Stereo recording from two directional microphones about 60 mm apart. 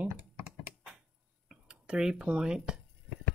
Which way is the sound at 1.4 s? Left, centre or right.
Centre.